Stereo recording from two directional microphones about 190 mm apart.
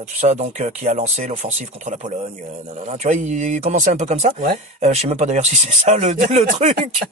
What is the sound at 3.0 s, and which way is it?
Speech, 40° right (ahead or behind).